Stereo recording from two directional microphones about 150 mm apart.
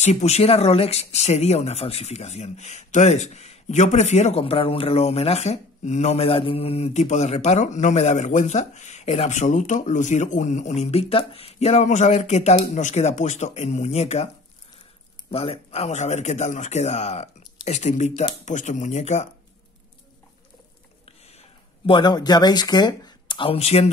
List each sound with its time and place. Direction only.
0.0 s speech: 45° left (ahead or behind)
15.3 s speech: 40° left (ahead or behind)
21.3 s speech: 40° left (ahead or behind)